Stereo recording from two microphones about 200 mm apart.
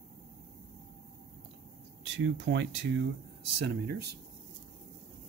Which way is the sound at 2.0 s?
65° right (ahead or behind).